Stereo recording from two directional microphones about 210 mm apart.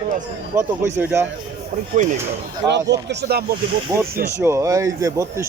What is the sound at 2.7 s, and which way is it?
Speech, 55° right (ahead or behind).